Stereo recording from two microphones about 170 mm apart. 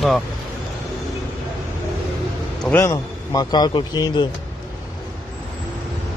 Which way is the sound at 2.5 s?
5° left (ahead or behind).